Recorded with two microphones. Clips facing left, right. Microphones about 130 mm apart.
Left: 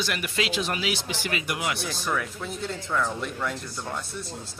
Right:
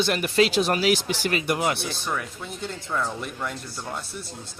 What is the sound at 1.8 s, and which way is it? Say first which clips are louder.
Speech: left 1 dB; centre (ahead or behind).